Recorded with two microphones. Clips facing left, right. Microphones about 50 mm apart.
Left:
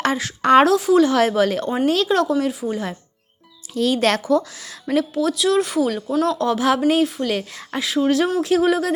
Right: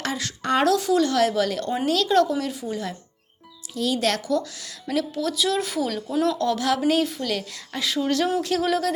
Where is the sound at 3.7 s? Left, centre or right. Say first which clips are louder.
Left 5 dB; left.